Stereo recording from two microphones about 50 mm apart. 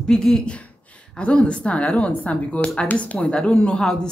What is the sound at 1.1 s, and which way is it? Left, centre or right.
A woman's voice, left.